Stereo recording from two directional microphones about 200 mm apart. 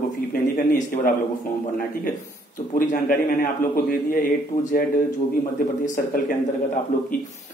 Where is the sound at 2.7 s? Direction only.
40° left (ahead or behind).